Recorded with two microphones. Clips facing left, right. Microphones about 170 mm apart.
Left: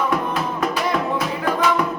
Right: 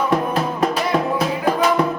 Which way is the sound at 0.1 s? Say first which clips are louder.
Right 3 dB; 30° right (ahead or behind).